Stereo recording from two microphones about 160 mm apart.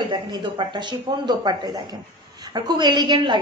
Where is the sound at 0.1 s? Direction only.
25° right (ahead or behind).